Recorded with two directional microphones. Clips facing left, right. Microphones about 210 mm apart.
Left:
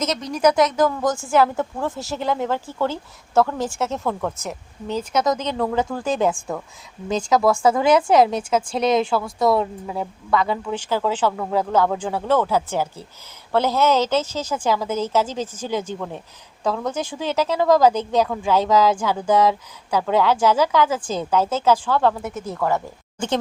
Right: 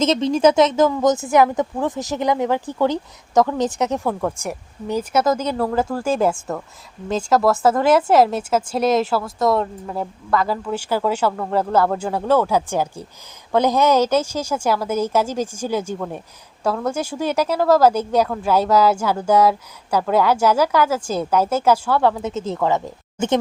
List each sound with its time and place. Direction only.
0.0 s speech: 25° right (ahead or behind); by 22.1 s 10° right (ahead or behind)
22.2 s speech: 20° right (ahead or behind)